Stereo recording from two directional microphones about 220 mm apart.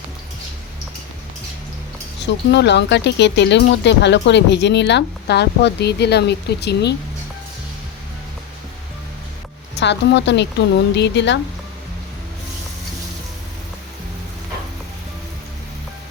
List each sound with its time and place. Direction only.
2.2 s speech: 50° left (ahead or behind)
9.7 s speech: 50° left (ahead or behind)